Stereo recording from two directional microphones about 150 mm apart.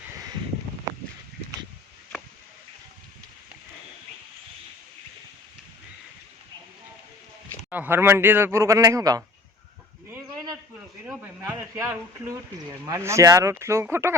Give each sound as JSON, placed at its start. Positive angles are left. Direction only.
{"t": 7.7, "sound": "speech", "side_deg": -15}
{"t": 11.0, "sound": "speech", "side_deg": -10}